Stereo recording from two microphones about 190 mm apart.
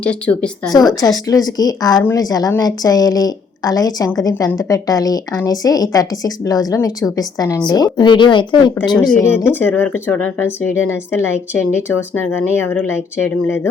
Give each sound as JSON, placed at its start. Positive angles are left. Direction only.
{"t": 0.0, "sound": "speech", "side_deg": 5}
{"t": 0.8, "sound": "a woman's voice", "side_deg": 20}
{"t": 8.7, "sound": "speech", "side_deg": 15}